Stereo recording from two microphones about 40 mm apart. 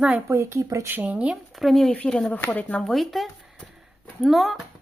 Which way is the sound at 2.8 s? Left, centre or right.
Centre.